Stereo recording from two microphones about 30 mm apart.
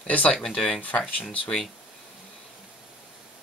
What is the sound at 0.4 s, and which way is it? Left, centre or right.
Speech, centre.